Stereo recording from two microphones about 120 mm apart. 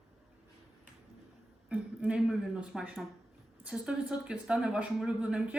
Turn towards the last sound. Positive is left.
turn(degrees=-10)  # may be behind; listen again after turning